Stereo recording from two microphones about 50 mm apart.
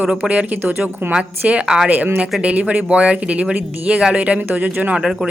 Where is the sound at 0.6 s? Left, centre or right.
Right.